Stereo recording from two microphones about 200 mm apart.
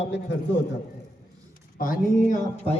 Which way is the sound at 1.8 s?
40° left (ahead or behind).